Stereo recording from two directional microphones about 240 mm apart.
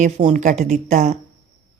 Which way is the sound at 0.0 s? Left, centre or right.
Right.